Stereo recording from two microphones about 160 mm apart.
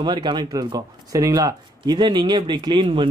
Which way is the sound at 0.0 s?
30° right (ahead or behind).